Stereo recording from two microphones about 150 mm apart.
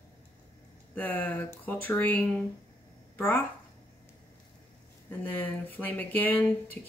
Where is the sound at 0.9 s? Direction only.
10° left (ahead or behind).